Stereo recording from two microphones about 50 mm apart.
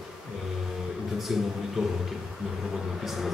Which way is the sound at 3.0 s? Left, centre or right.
Centre.